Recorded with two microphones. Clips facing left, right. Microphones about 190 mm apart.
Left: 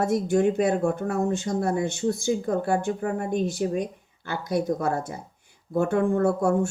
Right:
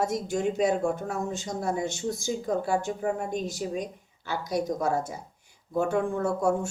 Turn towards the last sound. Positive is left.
turn(degrees=55)  # may be behind; listen again after turning